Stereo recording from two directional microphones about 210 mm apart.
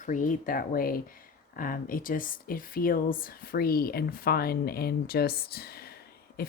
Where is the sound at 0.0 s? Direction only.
40° left (ahead or behind).